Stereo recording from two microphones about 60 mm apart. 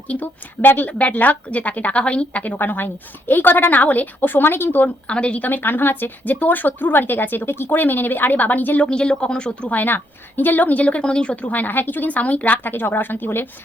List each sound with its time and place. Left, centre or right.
0.1 s a woman's voice: left
5.0 s a woman's voice: centre
5.4 s a woman's voice: left; by 9.7 s centre
9.7 s a woman's voice: left